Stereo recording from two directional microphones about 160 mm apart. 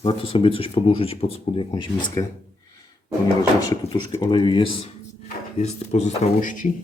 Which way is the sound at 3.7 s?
20° left (ahead or behind).